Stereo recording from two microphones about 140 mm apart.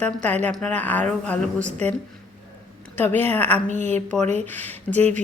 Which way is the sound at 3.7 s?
55° right (ahead or behind).